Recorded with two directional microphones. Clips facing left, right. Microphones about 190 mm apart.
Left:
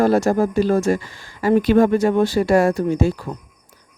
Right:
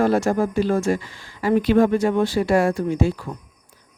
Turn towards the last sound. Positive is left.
turn(degrees=40)  # may be behind; listen again after turning